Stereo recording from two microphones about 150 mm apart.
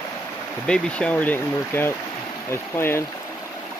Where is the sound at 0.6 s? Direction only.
5° left (ahead or behind).